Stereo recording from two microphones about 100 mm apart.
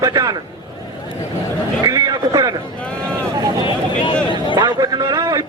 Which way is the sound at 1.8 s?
35° right (ahead or behind).